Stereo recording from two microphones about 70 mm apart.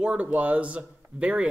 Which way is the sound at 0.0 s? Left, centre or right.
Centre.